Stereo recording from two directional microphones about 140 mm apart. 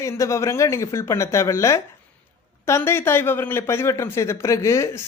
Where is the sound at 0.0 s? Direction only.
20° left (ahead or behind).